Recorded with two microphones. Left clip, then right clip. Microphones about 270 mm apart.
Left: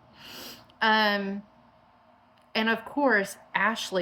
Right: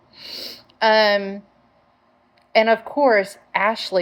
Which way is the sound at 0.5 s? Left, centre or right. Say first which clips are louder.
Right 7 dB; left.